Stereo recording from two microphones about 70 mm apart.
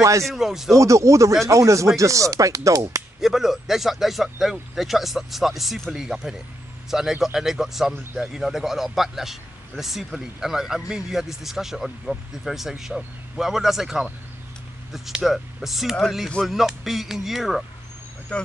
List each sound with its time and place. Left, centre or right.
0.2 s speech: centre
0.7 s speech: right
3.2 s speech: centre
18.3 s speech: centre